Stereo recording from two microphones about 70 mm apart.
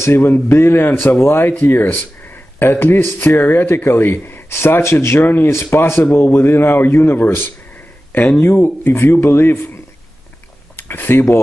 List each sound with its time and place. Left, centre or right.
0.0 s speech: left
10.8 s speech: left